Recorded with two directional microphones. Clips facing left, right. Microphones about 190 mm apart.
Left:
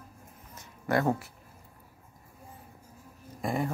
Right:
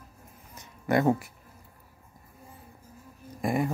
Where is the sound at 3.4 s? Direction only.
15° right (ahead or behind).